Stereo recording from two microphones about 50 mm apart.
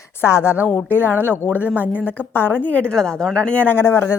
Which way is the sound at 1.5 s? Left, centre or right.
Right.